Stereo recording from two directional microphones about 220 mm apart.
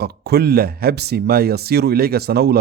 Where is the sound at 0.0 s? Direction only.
45° right (ahead or behind).